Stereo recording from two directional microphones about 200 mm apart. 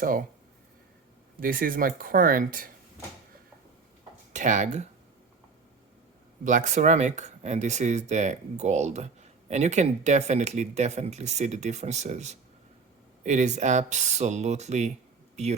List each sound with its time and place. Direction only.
1.4 s speech: 45° right (ahead or behind)
4.3 s speech: 40° right (ahead or behind)
6.4 s speech: 40° right (ahead or behind)